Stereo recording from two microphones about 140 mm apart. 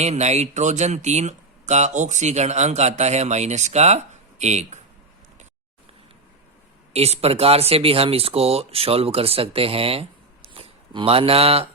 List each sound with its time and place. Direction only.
0.0 s speech: 50° right (ahead or behind)
6.9 s speech: 50° right (ahead or behind)